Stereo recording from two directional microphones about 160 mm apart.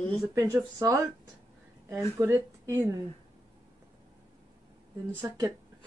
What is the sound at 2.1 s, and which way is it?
Speech, 15° right (ahead or behind).